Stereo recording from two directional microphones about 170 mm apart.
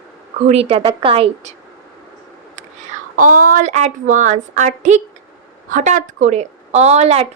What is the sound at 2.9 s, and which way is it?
A woman's voice, 50° right (ahead or behind).